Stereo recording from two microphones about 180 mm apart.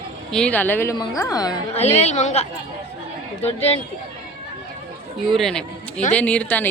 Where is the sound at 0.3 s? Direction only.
5° left (ahead or behind); by 1.5 s 20° left (ahead or behind).